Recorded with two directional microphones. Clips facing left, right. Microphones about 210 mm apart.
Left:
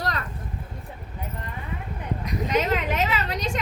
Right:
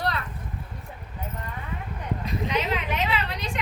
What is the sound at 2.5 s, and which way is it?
Speech, 45° left (ahead or behind).